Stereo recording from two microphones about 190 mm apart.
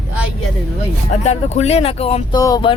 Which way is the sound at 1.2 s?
35° left (ahead or behind).